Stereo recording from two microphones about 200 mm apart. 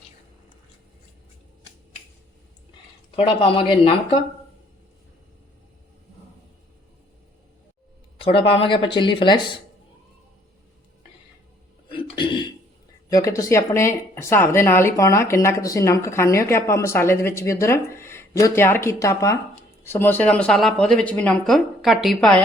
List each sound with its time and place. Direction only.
3.2 s speech: 25° left (ahead or behind)
8.2 s speech: 25° left (ahead or behind)
11.9 s a sound: 25° left (ahead or behind)
13.1 s speech: 15° left (ahead or behind); by 22.4 s centre (ahead or behind)